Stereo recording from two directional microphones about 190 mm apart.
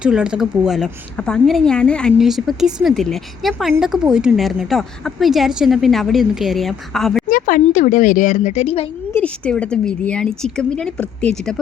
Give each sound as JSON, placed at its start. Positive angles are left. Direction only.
{"t": 0.0, "sound": "a woman's voice", "side_deg": -5}
{"t": 7.3, "sound": "speech", "side_deg": 45}
{"t": 9.1, "sound": "a woman's voice", "side_deg": 5}